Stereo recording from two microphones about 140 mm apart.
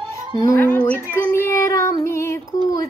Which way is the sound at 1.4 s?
20° left (ahead or behind).